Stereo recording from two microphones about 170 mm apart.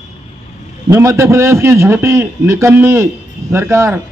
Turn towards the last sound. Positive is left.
turn(degrees=-15)  # may be behind; listen again after turning